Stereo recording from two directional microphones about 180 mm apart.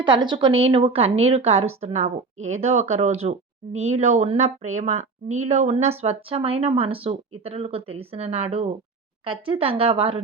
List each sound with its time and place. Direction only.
0.0 s speech: 25° right (ahead or behind)